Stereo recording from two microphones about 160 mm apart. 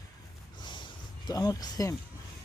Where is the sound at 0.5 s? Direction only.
30° left (ahead or behind).